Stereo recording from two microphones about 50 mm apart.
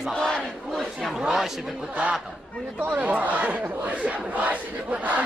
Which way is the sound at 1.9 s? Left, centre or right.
Right.